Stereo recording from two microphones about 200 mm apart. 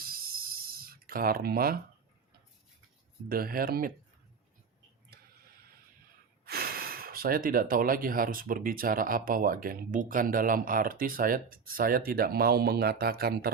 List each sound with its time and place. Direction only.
0.0 s a sound: 50° right (ahead or behind)
3.2 s speech: 45° right (ahead or behind)
6.4 s speech: 50° right (ahead or behind)